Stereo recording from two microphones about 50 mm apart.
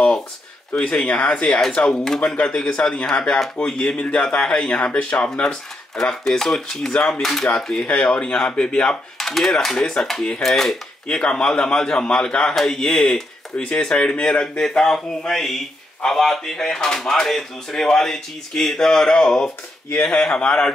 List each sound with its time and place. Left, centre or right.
0.7 s speech: centre
5.3 s speech: centre
7.8 s speech: left
9.2 s speech: centre
12.5 s speech: centre